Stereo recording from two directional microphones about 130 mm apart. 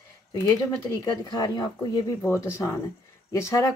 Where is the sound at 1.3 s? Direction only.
30° left (ahead or behind).